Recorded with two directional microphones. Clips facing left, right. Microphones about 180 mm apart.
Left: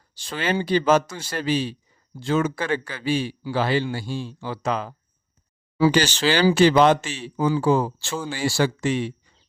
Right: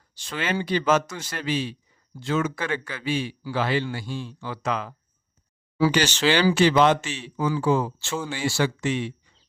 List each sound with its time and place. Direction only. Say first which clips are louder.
0.1 s a man's voice: left 3 dB; 35° left (ahead or behind)